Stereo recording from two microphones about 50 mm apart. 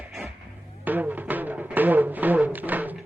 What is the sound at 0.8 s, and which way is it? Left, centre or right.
Music, right.